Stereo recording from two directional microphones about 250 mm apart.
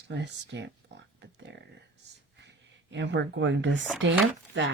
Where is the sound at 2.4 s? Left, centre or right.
Right.